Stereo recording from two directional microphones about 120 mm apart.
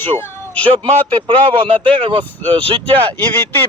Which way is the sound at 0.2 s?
20° left (ahead or behind).